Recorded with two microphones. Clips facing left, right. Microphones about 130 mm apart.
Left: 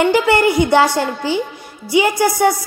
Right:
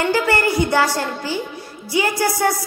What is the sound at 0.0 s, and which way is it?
A woman's voice, 20° left (ahead or behind).